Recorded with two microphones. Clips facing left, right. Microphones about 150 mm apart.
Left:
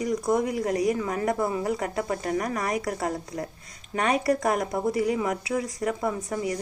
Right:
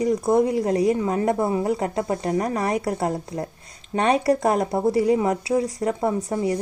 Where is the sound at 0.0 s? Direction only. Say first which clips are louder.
Right 5 dB; 30° right (ahead or behind).